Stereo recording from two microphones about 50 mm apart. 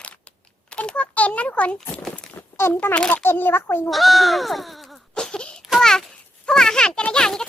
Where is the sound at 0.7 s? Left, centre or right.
Left.